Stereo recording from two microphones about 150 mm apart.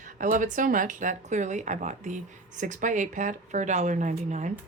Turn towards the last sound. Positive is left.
turn(degrees=-50)  # may be behind; listen again after turning